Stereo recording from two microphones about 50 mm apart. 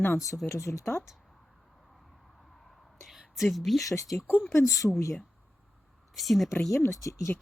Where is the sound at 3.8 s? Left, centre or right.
Left.